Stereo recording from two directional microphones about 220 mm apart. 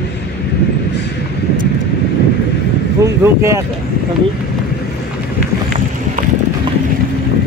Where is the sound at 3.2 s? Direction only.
15° right (ahead or behind).